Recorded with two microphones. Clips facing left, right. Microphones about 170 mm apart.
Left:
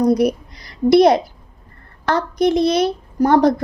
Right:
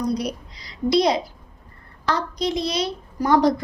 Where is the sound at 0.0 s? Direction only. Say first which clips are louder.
Left 9 dB; 55° left (ahead or behind).